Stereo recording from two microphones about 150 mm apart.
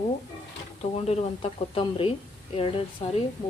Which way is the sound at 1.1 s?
40° left (ahead or behind).